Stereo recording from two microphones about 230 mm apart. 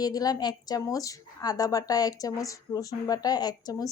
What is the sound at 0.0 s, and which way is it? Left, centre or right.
A woman's voice, centre.